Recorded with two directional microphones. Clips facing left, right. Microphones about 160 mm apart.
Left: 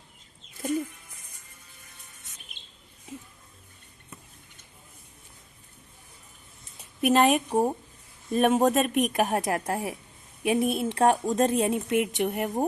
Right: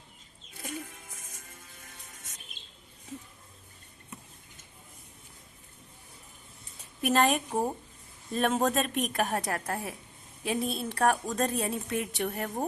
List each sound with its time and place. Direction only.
7.0 s speech: 15° left (ahead or behind)